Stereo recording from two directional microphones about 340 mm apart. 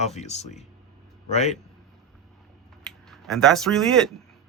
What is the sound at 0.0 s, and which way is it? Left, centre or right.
Speech, centre.